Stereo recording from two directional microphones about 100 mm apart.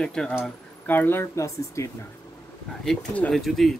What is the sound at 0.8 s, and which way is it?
Speech, 20° left (ahead or behind).